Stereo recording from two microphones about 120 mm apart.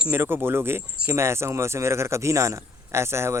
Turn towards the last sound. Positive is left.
turn(degrees=-20)  # may be behind; listen again after turning